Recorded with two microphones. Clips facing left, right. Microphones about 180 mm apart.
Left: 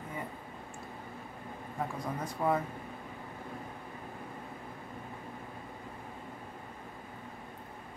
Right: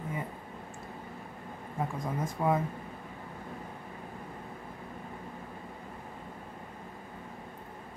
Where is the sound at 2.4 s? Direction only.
10° right (ahead or behind).